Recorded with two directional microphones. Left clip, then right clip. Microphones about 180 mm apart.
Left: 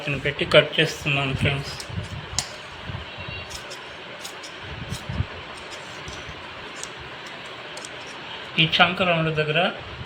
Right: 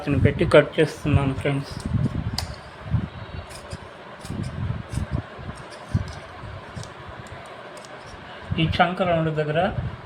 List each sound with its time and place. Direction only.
0.1 s speech: 60° right (ahead or behind)
8.5 s speech: 30° right (ahead or behind)